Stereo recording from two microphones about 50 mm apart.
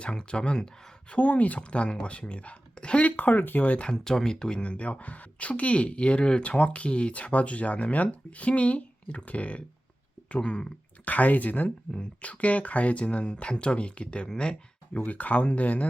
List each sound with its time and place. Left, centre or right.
0.0 s speech: centre
1.1 s speech: left
3.9 s speech: centre
11.0 s speech: left